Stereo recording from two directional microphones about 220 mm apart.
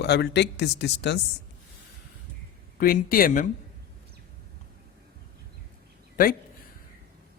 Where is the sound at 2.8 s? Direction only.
40° left (ahead or behind).